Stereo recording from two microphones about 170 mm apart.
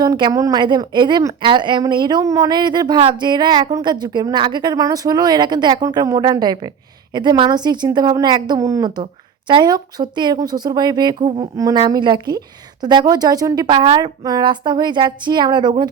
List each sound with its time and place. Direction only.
0.0 s a woman's voice: 25° right (ahead or behind)